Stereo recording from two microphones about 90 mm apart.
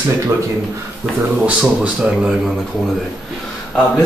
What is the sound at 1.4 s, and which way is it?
Speech, 15° right (ahead or behind).